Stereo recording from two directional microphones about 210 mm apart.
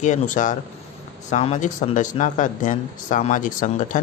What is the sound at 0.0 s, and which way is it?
Speech, 35° left (ahead or behind).